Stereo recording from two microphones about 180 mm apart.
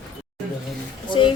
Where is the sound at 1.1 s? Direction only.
25° left (ahead or behind).